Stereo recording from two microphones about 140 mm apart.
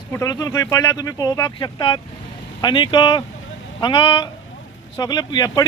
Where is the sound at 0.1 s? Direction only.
25° left (ahead or behind).